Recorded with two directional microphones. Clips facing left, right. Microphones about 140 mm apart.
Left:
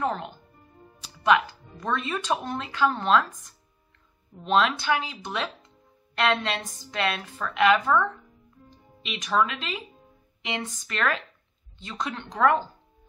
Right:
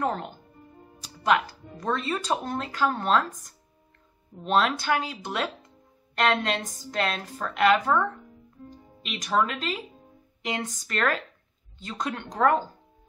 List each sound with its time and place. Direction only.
0.0 s speech: 40° right (ahead or behind)
1.3 s speech: 40° right (ahead or behind)
4.6 s speech: 45° right (ahead or behind)